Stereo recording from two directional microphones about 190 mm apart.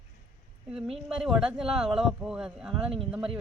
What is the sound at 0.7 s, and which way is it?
Speech, centre (ahead or behind).